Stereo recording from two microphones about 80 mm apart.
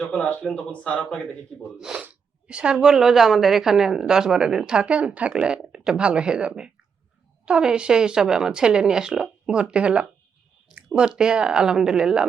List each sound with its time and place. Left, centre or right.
0.1 s speech: centre
1.8 s a woman's voice: centre